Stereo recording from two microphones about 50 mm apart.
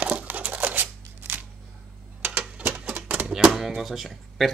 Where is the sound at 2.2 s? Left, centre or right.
Right.